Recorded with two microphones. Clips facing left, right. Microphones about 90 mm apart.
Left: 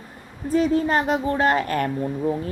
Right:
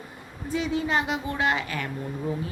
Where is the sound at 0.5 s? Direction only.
40° left (ahead or behind).